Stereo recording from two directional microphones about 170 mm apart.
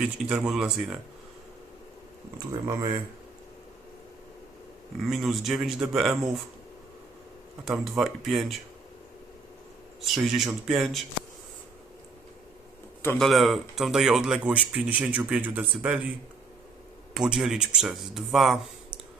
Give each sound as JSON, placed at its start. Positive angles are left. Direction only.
{"t": 0.0, "sound": "speech", "side_deg": -5}
{"t": 2.4, "sound": "speech", "side_deg": -20}
{"t": 5.0, "sound": "speech", "side_deg": 0}
{"t": 7.6, "sound": "speech", "side_deg": 0}
{"t": 10.0, "sound": "speech", "side_deg": 0}
{"t": 13.1, "sound": "speech", "side_deg": 0}
{"t": 17.2, "sound": "speech", "side_deg": -5}